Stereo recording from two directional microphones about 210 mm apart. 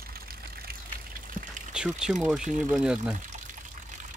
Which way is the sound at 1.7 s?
5° right (ahead or behind).